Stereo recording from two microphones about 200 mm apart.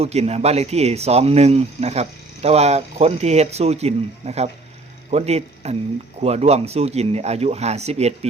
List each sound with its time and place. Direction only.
0.0 s speech: 30° right (ahead or behind)